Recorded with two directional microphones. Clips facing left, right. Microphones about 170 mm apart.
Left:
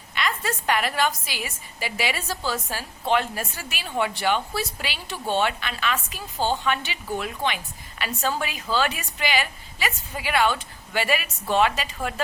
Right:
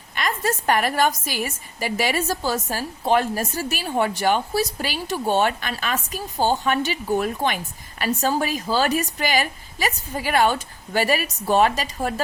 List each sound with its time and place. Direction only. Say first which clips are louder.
0.1 s a woman's voice: right 3 dB; 45° right (ahead or behind)